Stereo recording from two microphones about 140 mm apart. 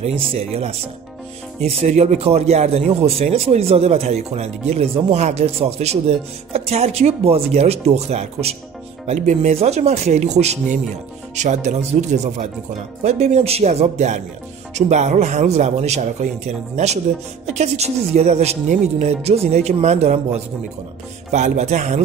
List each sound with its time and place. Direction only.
0.0 s speech: 40° right (ahead or behind)